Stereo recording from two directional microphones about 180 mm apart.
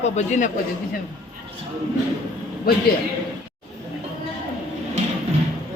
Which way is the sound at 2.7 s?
55° left (ahead or behind).